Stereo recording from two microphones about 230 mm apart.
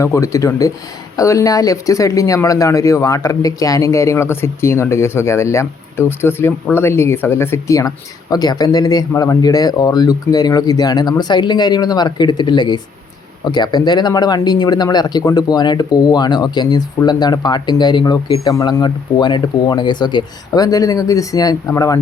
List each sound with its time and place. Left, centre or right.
0.0 s speech: centre